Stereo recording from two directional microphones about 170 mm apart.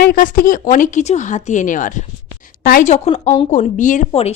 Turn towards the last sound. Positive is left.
turn(degrees=35)  # may be behind; listen again after turning